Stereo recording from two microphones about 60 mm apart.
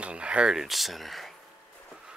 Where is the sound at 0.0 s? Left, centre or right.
Centre.